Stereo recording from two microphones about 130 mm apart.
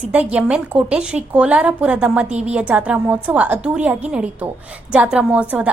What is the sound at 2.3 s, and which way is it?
Speech, 60° right (ahead or behind).